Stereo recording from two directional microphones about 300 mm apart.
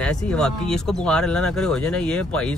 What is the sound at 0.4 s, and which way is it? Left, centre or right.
Speech, centre.